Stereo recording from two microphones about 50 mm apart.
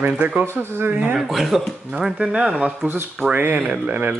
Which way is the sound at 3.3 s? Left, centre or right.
Right.